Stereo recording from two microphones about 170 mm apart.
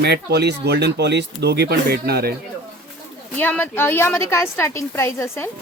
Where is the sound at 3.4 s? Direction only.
10° left (ahead or behind).